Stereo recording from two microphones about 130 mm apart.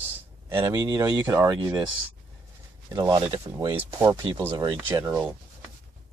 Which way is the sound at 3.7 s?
15° right (ahead or behind).